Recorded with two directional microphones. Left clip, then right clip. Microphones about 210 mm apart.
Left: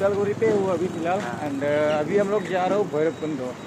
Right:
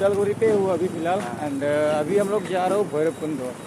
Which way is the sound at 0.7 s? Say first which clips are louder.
Right 1 dB; 15° right (ahead or behind).